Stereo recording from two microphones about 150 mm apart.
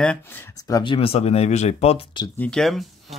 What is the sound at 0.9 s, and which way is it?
Speech, 40° left (ahead or behind).